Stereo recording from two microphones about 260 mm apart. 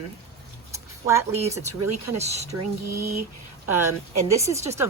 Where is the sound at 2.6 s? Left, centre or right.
Right.